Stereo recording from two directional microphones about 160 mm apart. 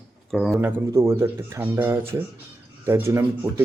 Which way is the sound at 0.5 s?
15° right (ahead or behind).